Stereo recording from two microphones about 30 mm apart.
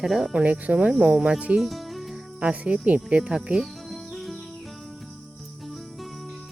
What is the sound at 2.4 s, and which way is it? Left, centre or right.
Speech, right.